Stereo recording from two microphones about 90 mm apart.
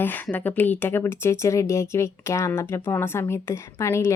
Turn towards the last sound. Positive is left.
turn(degrees=30)  # may be behind; listen again after turning